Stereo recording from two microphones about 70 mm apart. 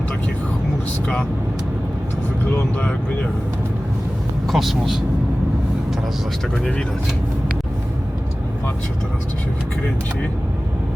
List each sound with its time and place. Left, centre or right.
4.4 s speech: centre